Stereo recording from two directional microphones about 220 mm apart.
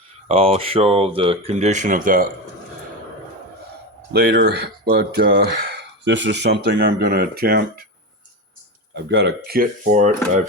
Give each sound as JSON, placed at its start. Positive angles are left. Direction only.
{"t": 0.3, "sound": "speech", "side_deg": -25}
{"t": 4.1, "sound": "speech", "side_deg": -50}
{"t": 9.0, "sound": "speech", "side_deg": -50}